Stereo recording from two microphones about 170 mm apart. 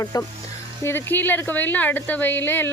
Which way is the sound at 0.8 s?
10° left (ahead or behind).